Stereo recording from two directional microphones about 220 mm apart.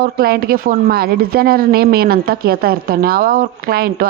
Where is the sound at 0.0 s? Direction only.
45° right (ahead or behind).